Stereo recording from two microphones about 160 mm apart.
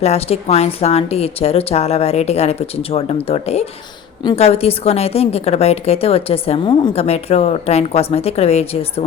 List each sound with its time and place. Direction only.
0.0 s a woman's voice: 40° left (ahead or behind)